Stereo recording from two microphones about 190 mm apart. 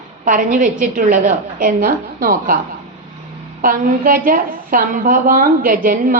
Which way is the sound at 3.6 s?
50° right (ahead or behind).